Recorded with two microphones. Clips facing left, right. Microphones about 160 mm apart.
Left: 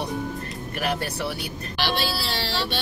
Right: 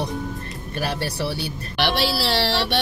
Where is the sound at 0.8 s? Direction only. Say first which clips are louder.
Right 1 dB; 30° right (ahead or behind).